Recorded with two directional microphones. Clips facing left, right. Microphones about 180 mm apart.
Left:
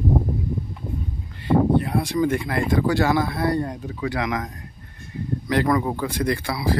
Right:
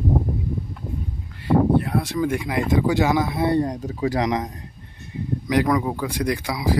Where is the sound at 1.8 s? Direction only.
Centre (ahead or behind); by 3.7 s 25° right (ahead or behind).